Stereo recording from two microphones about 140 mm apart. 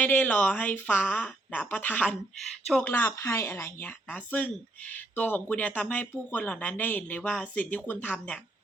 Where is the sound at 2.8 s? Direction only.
15° left (ahead or behind).